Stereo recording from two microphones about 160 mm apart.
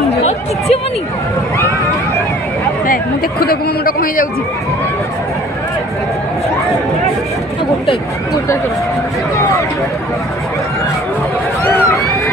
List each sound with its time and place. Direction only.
0.2 s chatter: 40° left (ahead or behind)
2.9 s speech: 70° left (ahead or behind)
11.6 s run: 20° left (ahead or behind)